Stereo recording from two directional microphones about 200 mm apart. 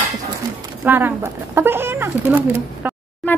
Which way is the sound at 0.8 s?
10° right (ahead or behind).